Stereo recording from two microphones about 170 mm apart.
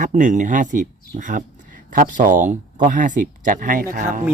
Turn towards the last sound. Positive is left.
turn(degrees=-50)  # may be behind; listen again after turning